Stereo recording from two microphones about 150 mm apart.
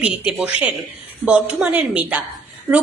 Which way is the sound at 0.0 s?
5° right (ahead or behind).